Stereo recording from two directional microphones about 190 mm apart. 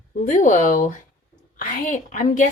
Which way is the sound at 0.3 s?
40° left (ahead or behind).